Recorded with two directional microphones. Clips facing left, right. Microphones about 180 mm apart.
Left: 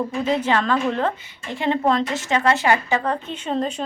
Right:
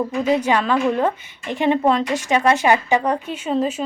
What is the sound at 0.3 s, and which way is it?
Speech, 10° right (ahead or behind).